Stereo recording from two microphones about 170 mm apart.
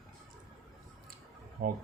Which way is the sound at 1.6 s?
60° right (ahead or behind).